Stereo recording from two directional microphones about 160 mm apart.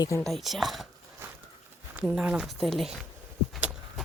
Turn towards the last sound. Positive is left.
turn(degrees=0)  # may be behind; listen again after turning